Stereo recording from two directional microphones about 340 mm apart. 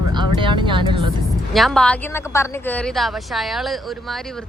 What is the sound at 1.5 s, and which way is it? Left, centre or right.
Speech, centre.